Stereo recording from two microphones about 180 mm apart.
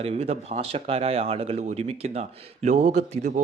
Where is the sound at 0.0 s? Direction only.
35° right (ahead or behind).